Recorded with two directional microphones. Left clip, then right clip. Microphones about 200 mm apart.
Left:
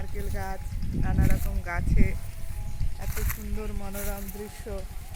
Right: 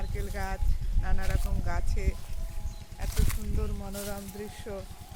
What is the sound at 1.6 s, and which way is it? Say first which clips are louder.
Speech: left 8 dB; 20° left (ahead or behind).